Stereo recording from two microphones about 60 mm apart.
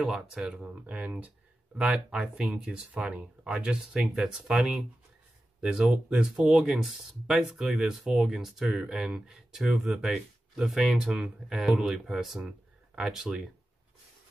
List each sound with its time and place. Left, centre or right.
0.0 s speech: centre
0.8 s speech: right; by 13.5 s centre